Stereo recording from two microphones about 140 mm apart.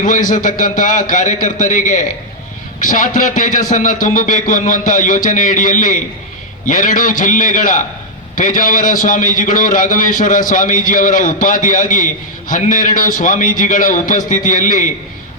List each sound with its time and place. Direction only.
0.0 s a man's voice: 75° left (ahead or behind)